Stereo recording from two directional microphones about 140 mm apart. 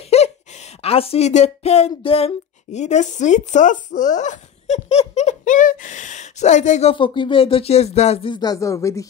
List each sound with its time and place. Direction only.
0.1 s a sound: 50° left (ahead or behind)
0.8 s speech: 45° left (ahead or behind)
6.9 s speech: 35° left (ahead or behind)
8.3 s speech: 30° left (ahead or behind)